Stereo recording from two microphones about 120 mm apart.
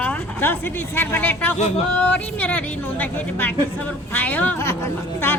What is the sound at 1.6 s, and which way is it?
Yodeling, 65° left (ahead or behind).